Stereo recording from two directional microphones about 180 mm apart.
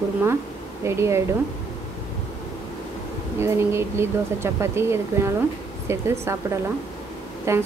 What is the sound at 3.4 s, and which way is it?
Speech, 15° right (ahead or behind).